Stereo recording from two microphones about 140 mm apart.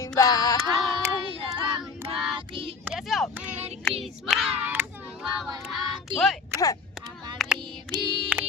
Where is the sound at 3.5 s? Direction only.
50° right (ahead or behind).